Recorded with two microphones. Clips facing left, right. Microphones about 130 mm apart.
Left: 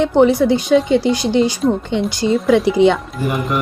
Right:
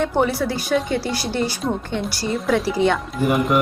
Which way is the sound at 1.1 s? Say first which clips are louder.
Left 8 dB; 20° left (ahead or behind).